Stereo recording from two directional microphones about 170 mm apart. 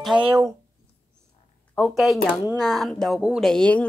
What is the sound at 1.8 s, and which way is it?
Speech, centre (ahead or behind).